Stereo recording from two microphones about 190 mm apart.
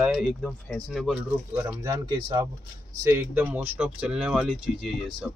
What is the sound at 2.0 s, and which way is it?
Speech, 20° right (ahead or behind).